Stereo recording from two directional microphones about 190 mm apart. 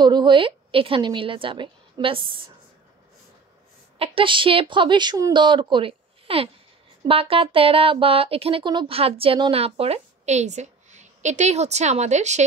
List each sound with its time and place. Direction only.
0.0 s speech: 25° right (ahead or behind)
4.0 s speech: 30° right (ahead or behind)